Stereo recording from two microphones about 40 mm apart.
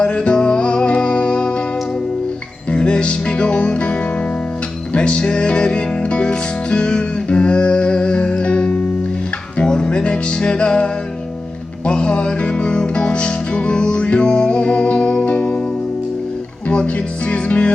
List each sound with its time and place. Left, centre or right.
0.0 s music: left
2.6 s music: left
11.9 s music: left
16.6 s speech: left